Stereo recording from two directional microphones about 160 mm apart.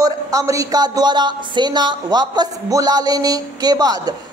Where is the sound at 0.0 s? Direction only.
20° right (ahead or behind).